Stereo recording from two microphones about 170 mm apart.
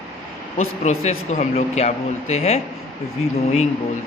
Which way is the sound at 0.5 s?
40° left (ahead or behind).